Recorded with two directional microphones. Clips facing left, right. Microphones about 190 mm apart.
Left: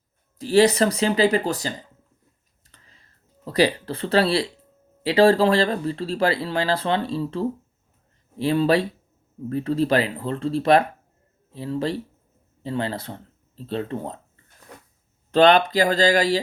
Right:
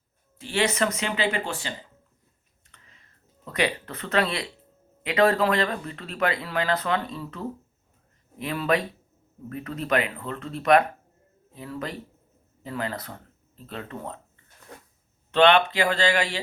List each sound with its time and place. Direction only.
0.3 s speech: 35° left (ahead or behind)
2.6 s clicking: 35° left (ahead or behind)
5.0 s speech: 30° left (ahead or behind)
15.3 s speech: 40° left (ahead or behind)